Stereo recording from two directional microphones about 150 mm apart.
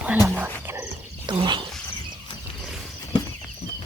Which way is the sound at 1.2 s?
30° right (ahead or behind).